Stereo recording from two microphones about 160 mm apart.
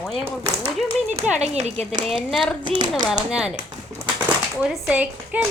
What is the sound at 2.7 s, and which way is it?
Speech, 30° right (ahead or behind).